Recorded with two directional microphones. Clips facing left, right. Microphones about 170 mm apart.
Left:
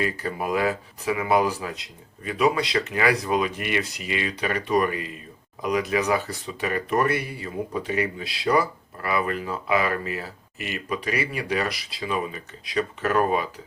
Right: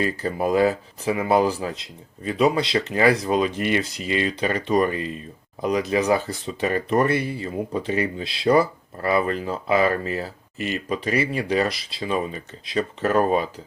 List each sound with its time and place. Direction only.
0.0 s speech: 30° right (ahead or behind)